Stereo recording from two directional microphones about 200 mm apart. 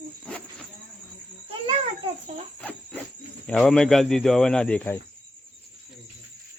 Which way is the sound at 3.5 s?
5° left (ahead or behind).